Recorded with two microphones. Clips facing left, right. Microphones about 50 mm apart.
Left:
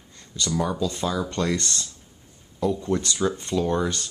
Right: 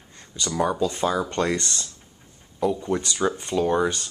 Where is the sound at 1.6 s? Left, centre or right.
Centre.